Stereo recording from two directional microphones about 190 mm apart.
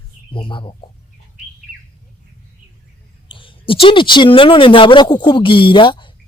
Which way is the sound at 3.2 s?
25° left (ahead or behind).